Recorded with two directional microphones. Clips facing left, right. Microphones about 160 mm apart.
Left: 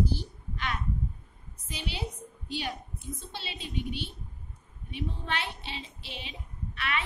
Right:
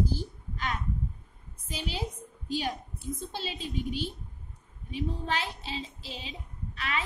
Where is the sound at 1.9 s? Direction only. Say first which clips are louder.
Right 2 dB; 45° right (ahead or behind).